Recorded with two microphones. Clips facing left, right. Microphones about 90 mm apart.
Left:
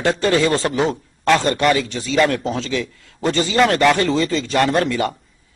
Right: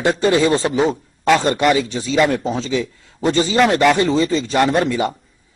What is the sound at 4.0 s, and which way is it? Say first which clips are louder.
Speech: right 2 dB; 20° right (ahead or behind).